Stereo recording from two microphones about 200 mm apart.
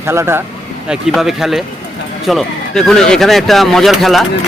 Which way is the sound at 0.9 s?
Centre (ahead or behind).